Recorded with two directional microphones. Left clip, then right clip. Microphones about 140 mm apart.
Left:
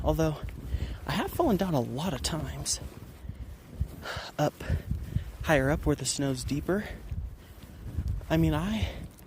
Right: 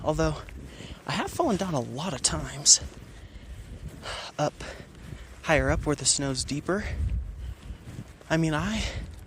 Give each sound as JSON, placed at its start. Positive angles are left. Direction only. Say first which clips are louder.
{"t": 0.0, "sound": "speech", "louder": "right 2 dB", "side_deg": 25}
{"t": 2.5, "sound": "speech", "louder": "right 13 dB", "side_deg": 10}
{"t": 4.0, "sound": "speech", "louder": "right 1 dB", "side_deg": 35}
{"t": 8.3, "sound": "speech", "louder": "right 2 dB", "side_deg": 20}